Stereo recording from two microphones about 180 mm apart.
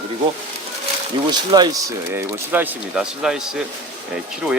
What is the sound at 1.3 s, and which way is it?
Speech, 25° right (ahead or behind).